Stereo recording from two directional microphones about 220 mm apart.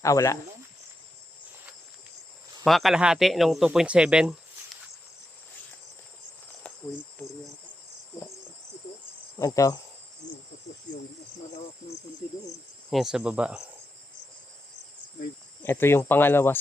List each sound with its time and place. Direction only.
0.0 s speech: 15° left (ahead or behind)
2.6 s speech: centre (ahead or behind)
9.4 s speech: 15° left (ahead or behind)
12.9 s speech: centre (ahead or behind)
15.6 s speech: 10° left (ahead or behind)